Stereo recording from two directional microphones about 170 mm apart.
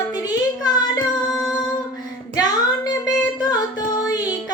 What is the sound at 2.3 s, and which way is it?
Child singing, 20° left (ahead or behind).